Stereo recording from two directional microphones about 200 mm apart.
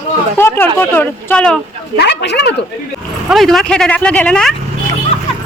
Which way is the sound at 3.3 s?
Centre (ahead or behind).